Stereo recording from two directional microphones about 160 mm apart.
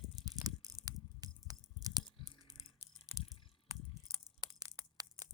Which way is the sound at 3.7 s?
25° right (ahead or behind).